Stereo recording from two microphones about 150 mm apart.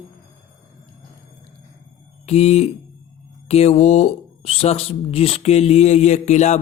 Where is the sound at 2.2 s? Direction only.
45° left (ahead or behind).